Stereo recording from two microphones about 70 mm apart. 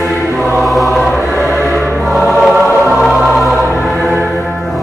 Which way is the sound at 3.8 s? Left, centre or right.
Centre.